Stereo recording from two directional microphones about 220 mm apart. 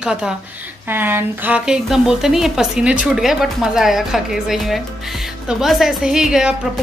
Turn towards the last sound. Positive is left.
turn(degrees=0)  # may be behind; listen again after turning